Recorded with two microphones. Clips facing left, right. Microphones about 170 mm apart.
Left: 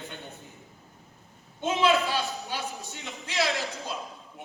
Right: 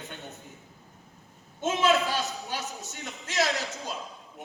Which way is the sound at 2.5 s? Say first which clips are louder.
Left 1 dB; 45° right (ahead or behind).